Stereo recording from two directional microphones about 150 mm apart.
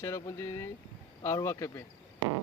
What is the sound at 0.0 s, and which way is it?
Speech, 20° left (ahead or behind).